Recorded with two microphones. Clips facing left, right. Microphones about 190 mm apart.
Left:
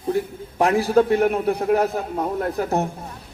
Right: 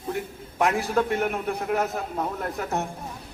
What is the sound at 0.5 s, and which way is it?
A man's voice, 35° left (ahead or behind).